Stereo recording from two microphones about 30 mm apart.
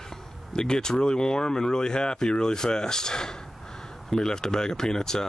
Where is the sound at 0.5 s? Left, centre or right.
Left.